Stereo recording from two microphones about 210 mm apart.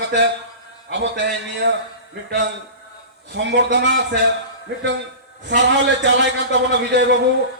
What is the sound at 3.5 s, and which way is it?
A man's voice, 55° right (ahead or behind).